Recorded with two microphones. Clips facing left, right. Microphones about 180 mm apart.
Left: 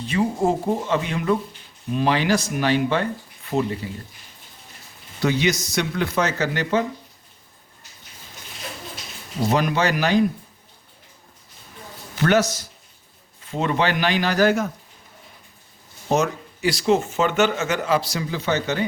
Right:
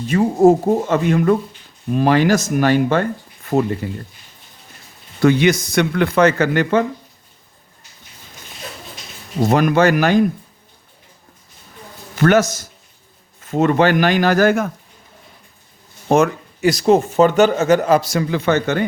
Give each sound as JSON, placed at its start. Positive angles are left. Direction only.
{"t": 0.0, "sound": "speech", "side_deg": -45}
{"t": 5.2, "sound": "speech", "side_deg": -55}
{"t": 9.4, "sound": "speech", "side_deg": -50}
{"t": 12.1, "sound": "a man's voice", "side_deg": -50}
{"t": 16.0, "sound": "speech", "side_deg": -55}